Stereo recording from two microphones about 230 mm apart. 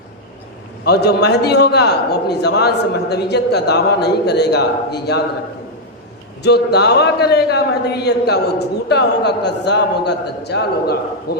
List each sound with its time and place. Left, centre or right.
0.9 s a man's voice: left
6.4 s a man's voice: left